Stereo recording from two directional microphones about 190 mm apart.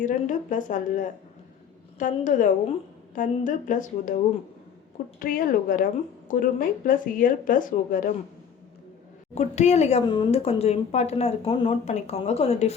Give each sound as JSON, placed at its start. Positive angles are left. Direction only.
{"t": 0.0, "sound": "a woman's voice", "side_deg": 40}
{"t": 5.2, "sound": "a woman's voice", "side_deg": 45}
{"t": 9.3, "sound": "speech", "side_deg": 35}